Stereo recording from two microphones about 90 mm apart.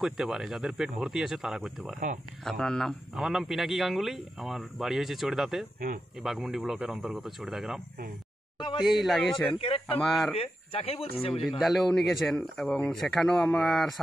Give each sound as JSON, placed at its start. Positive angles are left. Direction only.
{"t": 0.0, "sound": "a man's voice", "side_deg": -5}
{"t": 2.4, "sound": "a man's voice", "side_deg": 5}
{"t": 8.5, "sound": "speech", "side_deg": 60}
{"t": 8.8, "sound": "a man's voice", "side_deg": 0}
{"t": 9.6, "sound": "speech", "side_deg": 85}
{"t": 10.0, "sound": "a man's voice", "side_deg": 0}
{"t": 10.3, "sound": "speech", "side_deg": 90}
{"t": 11.6, "sound": "a man's voice", "side_deg": 0}